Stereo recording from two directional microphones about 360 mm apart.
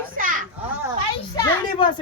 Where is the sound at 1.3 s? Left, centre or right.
Centre.